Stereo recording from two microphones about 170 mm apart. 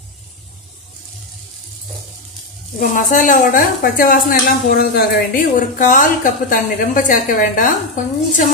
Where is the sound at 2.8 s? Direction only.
50° left (ahead or behind).